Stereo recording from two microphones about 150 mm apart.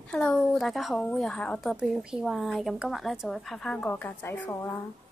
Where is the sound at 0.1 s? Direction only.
5° left (ahead or behind).